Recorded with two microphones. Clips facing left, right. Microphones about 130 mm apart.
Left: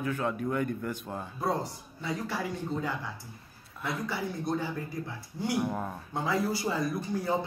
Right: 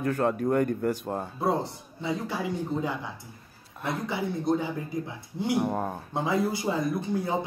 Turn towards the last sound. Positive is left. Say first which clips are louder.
# right 3 dB
turn(degrees=-25)  # may be behind; listen again after turning